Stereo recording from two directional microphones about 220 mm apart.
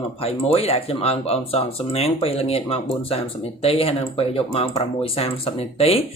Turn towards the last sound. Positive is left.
turn(degrees=25)  # may be behind; listen again after turning